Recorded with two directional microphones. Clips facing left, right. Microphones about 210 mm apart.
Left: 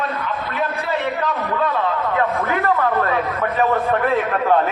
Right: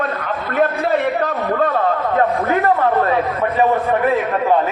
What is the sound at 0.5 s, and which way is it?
A man's voice, 50° right (ahead or behind).